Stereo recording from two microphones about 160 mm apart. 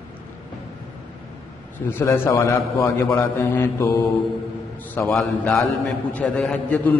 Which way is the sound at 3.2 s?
15° left (ahead or behind).